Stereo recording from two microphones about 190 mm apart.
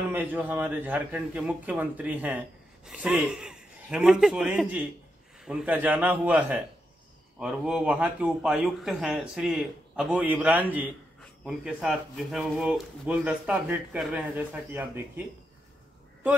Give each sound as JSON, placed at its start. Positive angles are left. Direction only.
{"t": 0.1, "sound": "a man's voice", "side_deg": -10}